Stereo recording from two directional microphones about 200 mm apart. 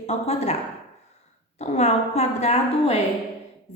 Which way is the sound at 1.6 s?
35° left (ahead or behind).